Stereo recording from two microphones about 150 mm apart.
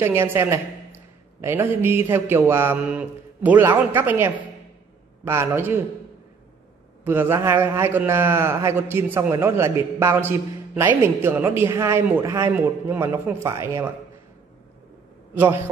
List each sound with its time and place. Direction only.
0.0 s speech: 15° right (ahead or behind)
7.1 s speech: 15° right (ahead or behind)